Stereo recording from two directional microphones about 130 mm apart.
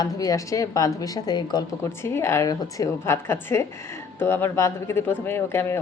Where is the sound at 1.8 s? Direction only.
20° left (ahead or behind).